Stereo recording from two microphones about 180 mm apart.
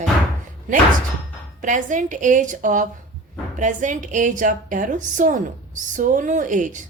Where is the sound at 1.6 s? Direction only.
45° right (ahead or behind).